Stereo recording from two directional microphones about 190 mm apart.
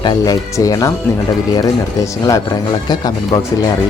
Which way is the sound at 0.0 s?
20° left (ahead or behind).